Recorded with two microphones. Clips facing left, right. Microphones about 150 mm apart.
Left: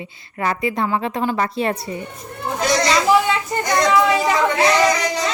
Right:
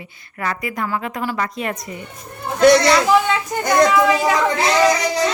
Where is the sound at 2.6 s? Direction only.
60° right (ahead or behind).